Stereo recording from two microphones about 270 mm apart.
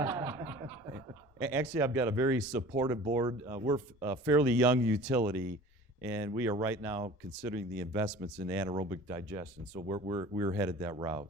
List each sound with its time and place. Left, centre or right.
0.0 s snicker: centre
1.4 s speech: centre